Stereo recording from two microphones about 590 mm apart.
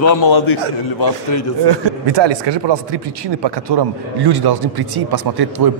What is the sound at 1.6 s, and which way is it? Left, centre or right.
A man's voice, right.